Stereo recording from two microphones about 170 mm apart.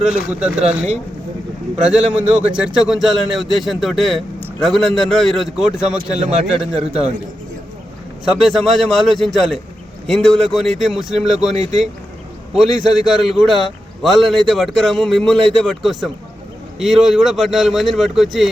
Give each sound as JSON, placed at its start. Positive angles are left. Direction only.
{"t": 0.0, "sound": "a man's voice", "side_deg": -5}
{"t": 1.7, "sound": "a man's voice", "side_deg": -5}
{"t": 8.2, "sound": "a man's voice", "side_deg": 0}
{"t": 11.5, "sound": "speech", "side_deg": -40}
{"t": 12.5, "sound": "a man's voice", "side_deg": 0}